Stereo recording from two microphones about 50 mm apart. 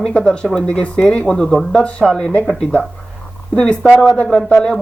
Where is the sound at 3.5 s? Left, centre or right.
Centre.